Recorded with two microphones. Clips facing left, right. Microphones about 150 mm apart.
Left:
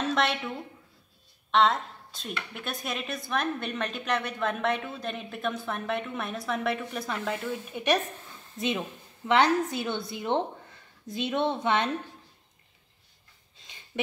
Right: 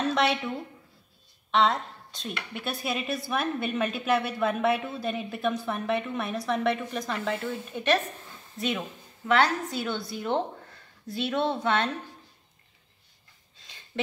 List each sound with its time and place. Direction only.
0.0 s a sound: centre (ahead or behind)
1.5 s a woman's voice: centre (ahead or behind); by 11.9 s 20° left (ahead or behind)
13.9 s speech: 10° left (ahead or behind)